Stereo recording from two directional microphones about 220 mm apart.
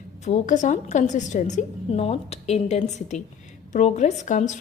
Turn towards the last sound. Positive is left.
turn(degrees=35)  # may be behind; listen again after turning